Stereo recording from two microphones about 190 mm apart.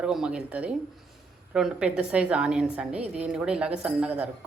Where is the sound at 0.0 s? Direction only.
5° right (ahead or behind).